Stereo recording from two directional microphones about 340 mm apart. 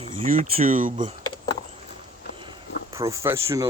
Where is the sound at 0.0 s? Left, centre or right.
Centre.